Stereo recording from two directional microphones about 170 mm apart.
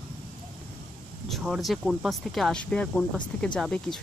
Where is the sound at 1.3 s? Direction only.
Centre (ahead or behind).